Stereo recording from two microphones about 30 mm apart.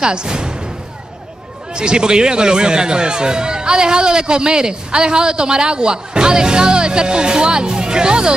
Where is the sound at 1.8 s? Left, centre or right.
Right.